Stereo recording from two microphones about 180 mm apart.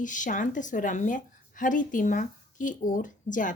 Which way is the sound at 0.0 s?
45° left (ahead or behind).